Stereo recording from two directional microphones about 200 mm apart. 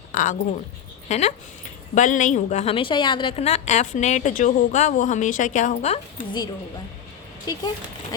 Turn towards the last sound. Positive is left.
turn(degrees=20)  # may be behind; listen again after turning